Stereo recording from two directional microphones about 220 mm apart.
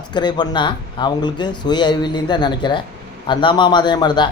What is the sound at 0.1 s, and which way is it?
Speech, 20° left (ahead or behind).